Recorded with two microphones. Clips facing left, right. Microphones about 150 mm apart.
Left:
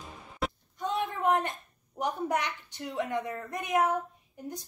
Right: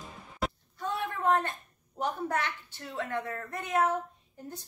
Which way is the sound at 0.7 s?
20° left (ahead or behind).